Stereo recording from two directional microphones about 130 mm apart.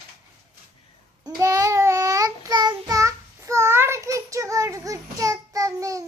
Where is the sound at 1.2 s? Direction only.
25° right (ahead or behind).